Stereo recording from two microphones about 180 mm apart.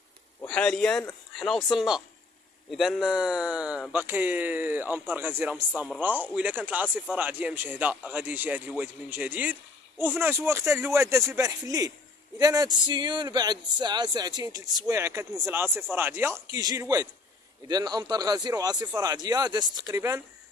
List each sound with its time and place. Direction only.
0.5 s speech: 5° left (ahead or behind); by 20.2 s 15° right (ahead or behind)